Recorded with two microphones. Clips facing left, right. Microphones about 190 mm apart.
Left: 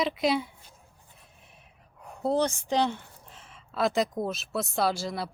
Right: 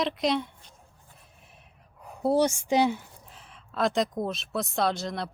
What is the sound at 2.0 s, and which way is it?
Speech, 5° right (ahead or behind).